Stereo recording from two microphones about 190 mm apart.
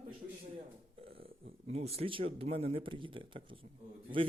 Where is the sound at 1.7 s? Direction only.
35° right (ahead or behind).